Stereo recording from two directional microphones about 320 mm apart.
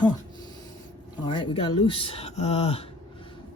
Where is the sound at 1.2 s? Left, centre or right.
Centre.